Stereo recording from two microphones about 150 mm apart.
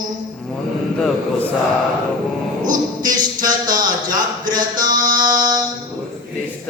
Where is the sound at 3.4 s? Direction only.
60° right (ahead or behind).